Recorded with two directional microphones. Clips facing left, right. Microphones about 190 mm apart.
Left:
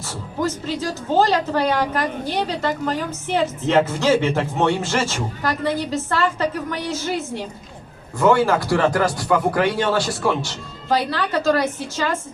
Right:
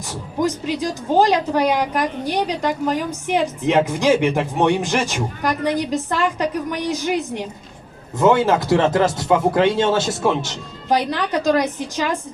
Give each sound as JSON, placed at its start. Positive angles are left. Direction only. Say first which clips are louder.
{"t": 0.1, "sound": "speech", "louder": "right 3 dB", "side_deg": -15}